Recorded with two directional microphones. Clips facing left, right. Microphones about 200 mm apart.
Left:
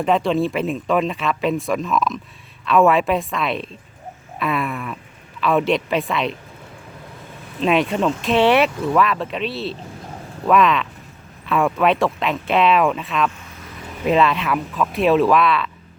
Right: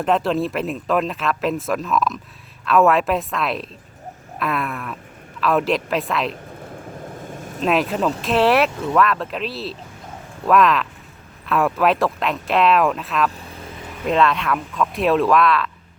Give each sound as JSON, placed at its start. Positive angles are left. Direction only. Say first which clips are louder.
{"t": 0.0, "sound": "speech", "louder": "left 1 dB", "side_deg": 0}
{"t": 7.1, "sound": "vehicle", "louder": "right 5 dB", "side_deg": -45}
{"t": 7.6, "sound": "speech", "louder": "left 1 dB", "side_deg": 0}